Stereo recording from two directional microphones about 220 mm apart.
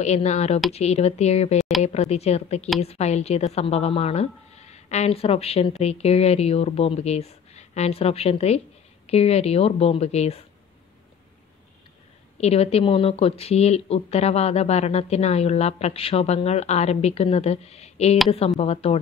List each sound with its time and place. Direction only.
0.0 s a woman's voice: 30° left (ahead or behind)
12.4 s a woman's voice: 30° left (ahead or behind)